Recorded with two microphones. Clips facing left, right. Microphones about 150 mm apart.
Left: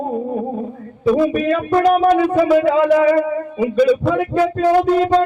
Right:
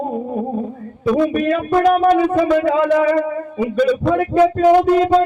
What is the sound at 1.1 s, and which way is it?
Music, 5° left (ahead or behind).